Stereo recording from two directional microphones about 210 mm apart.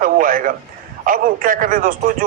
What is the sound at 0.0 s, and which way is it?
A man's voice, 40° right (ahead or behind).